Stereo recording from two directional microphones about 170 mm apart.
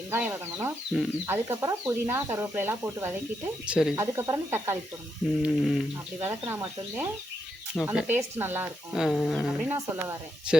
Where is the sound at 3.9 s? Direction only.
15° right (ahead or behind).